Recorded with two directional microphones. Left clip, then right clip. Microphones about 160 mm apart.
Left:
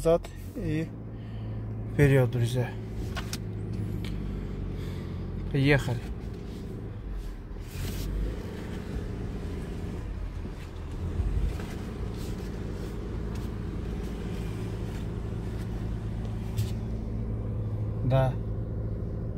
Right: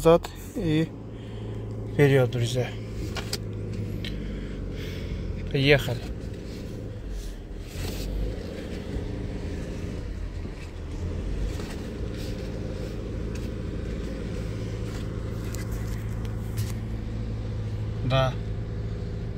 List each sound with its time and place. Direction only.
0.0 s speech: 15° right (ahead or behind)
2.0 s a man's voice: 15° left (ahead or behind)
5.5 s speech: 20° left (ahead or behind)
18.0 s speech: centre (ahead or behind)